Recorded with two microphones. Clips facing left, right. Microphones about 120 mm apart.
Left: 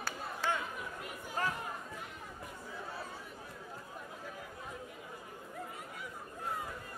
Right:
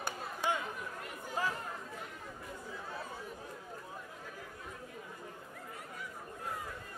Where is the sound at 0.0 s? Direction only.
15° right (ahead or behind).